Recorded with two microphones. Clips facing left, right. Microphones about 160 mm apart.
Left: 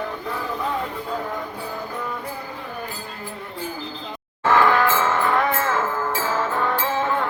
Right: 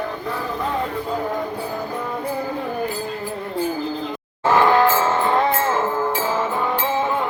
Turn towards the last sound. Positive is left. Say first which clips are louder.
# right 2 dB
turn(degrees=-15)  # may be behind; listen again after turning